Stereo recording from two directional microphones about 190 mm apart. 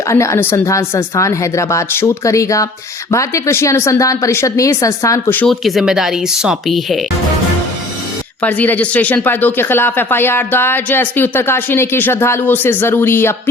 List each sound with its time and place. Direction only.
0.1 s speech: 15° left (ahead or behind); by 7.0 s centre (ahead or behind)
8.4 s speech: 10° left (ahead or behind)